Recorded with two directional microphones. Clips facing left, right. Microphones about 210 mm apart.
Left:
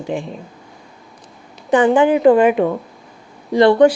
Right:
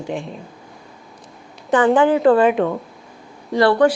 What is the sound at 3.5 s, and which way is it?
Speech, 20° left (ahead or behind).